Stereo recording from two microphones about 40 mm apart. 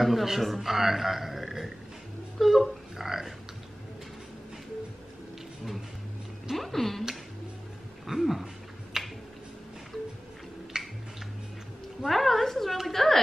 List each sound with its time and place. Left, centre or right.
0.0 s a man's voice: centre
6.5 s a woman's voice: centre
8.1 s a sound: centre
10.8 s music: centre
12.0 s a woman's voice: centre